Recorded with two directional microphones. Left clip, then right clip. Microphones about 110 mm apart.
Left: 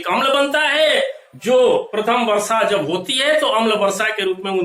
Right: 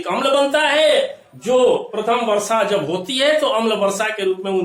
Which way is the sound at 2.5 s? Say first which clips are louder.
Left 1 dB; 35° right (ahead or behind).